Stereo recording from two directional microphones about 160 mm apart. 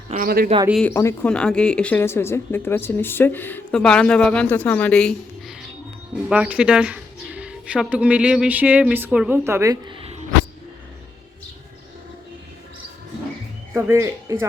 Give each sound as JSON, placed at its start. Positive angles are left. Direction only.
{"t": 0.1, "sound": "speech", "side_deg": -60}
{"t": 0.9, "sound": "speech", "side_deg": 15}
{"t": 6.2, "sound": "a woman's voice", "side_deg": -5}
{"t": 13.7, "sound": "a woman's voice", "side_deg": -15}